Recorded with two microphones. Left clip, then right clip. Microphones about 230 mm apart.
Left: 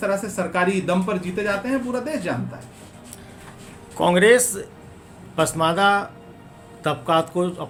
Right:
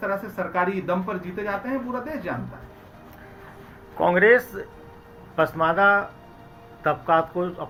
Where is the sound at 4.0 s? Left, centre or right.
Left.